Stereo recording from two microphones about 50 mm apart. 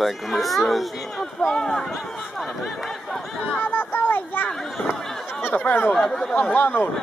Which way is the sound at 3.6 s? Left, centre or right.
Left.